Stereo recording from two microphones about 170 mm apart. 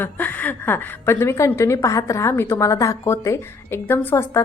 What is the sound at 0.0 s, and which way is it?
A woman's voice, 10° left (ahead or behind).